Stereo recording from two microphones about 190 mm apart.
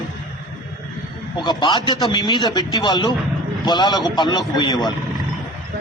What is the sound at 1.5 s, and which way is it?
A man's voice, 20° left (ahead or behind).